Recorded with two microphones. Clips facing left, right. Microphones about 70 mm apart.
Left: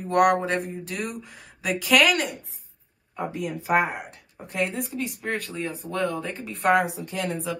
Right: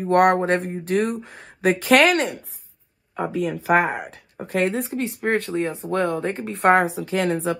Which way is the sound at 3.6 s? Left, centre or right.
Right.